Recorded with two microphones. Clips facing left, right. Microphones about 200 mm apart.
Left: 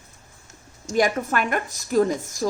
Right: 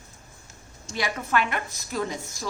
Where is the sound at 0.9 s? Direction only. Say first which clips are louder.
Left 5 dB; 45° left (ahead or behind).